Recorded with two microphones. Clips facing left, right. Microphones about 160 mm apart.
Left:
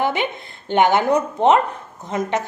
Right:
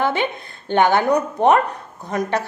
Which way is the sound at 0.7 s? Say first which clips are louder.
Even; 20° left (ahead or behind).